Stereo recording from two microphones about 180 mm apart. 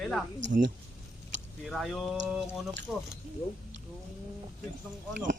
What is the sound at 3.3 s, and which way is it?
Speech, 50° right (ahead or behind).